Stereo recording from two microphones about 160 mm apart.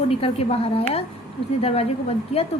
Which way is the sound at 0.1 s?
40° left (ahead or behind).